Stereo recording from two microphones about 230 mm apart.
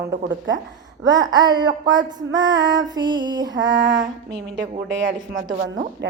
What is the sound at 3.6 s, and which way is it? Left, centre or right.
Speech, right.